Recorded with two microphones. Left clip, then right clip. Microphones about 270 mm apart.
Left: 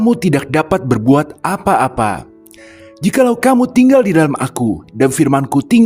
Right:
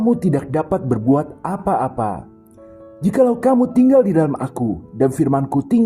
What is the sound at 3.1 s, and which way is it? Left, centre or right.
Music, left.